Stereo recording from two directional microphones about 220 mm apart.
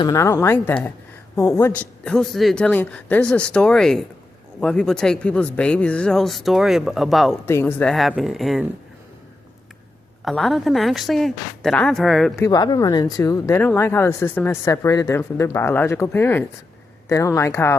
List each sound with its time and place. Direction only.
0.0 s speech: 15° left (ahead or behind)
7.4 s speech: 10° left (ahead or behind)
10.2 s speech: centre (ahead or behind)
12.4 s speech: 20° left (ahead or behind)